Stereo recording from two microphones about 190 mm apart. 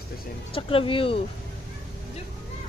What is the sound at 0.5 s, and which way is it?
Speech, 30° left (ahead or behind).